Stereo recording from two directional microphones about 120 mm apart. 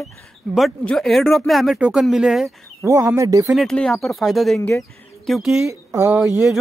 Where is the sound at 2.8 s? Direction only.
25° right (ahead or behind).